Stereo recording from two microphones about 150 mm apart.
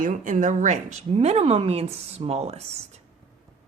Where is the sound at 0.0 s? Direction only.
60° right (ahead or behind).